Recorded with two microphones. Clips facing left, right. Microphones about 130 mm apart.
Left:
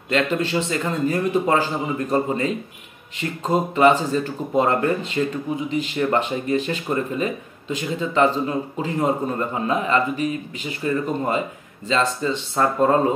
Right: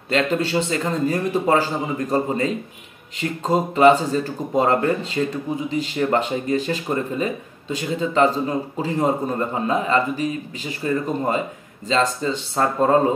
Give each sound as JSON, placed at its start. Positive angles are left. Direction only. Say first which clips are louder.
{"t": 0.1, "sound": "a man's voice", "louder": "right 1 dB", "side_deg": -35}